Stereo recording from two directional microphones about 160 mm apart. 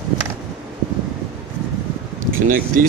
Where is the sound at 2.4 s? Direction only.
60° right (ahead or behind).